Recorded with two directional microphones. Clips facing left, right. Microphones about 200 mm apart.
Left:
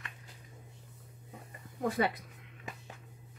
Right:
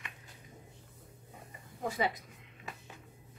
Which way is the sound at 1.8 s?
55° left (ahead or behind).